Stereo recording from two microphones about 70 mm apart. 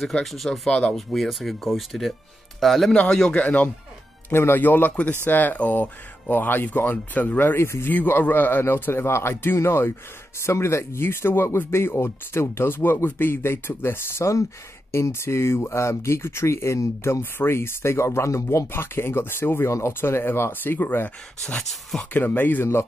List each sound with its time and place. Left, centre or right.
0.0 s a man's voice: centre
4.3 s speech: left
18.7 s speech: left
21.5 s speech: centre
22.1 s speech: left